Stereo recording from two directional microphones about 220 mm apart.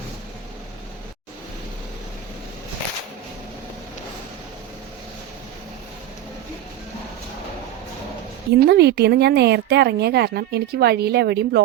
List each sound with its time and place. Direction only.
8.5 s speech: 45° right (ahead or behind)